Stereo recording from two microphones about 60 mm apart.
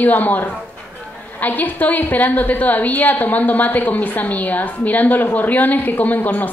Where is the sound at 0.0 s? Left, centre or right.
Left.